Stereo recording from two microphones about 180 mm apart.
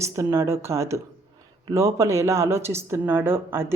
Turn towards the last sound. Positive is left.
turn(degrees=-15)  # may be behind; listen again after turning